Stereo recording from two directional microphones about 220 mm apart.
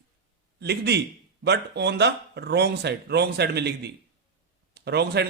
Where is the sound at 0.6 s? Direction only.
50° right (ahead or behind).